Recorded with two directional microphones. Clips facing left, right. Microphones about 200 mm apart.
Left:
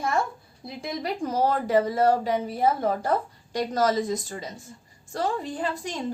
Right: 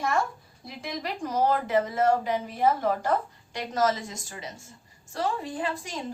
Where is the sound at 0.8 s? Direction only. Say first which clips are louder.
Left 3 dB; 30° left (ahead or behind).